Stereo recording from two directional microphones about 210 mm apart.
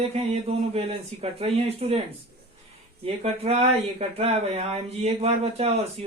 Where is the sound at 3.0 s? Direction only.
30° right (ahead or behind).